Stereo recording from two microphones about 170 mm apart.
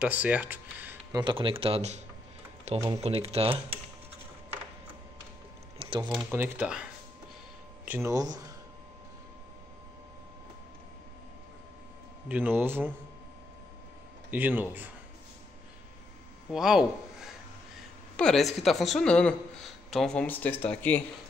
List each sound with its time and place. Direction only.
0.0 s speech: 10° right (ahead or behind)
1.1 s speech: 30° right (ahead or behind)
3.0 s speech: 35° right (ahead or behind)
5.8 s a sound: 30° right (ahead or behind)
6.3 s speech: 10° right (ahead or behind)
12.3 s speech: 10° right (ahead or behind)
14.3 s speech: 10° right (ahead or behind)
16.5 s a man's voice: centre (ahead or behind)